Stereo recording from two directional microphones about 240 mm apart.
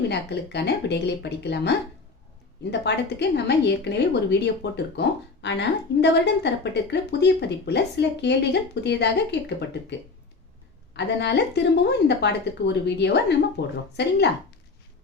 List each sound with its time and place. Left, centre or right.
0.1 s a woman's voice: left
10.9 s a woman's voice: left